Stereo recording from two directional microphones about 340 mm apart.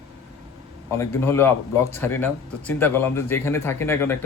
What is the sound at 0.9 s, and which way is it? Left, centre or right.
A man's voice, centre.